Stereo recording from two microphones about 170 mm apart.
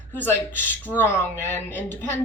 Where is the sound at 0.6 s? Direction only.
10° left (ahead or behind).